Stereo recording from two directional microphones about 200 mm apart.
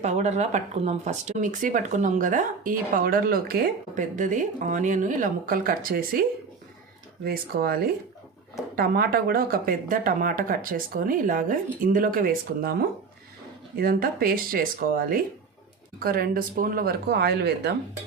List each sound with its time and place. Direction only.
0.0 s speech: 35° right (ahead or behind)
7.3 s speech: 50° right (ahead or behind)